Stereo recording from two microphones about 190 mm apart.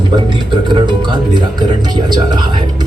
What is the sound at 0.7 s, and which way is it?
Speech, 25° right (ahead or behind).